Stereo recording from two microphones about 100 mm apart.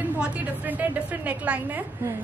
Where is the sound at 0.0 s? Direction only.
15° right (ahead or behind).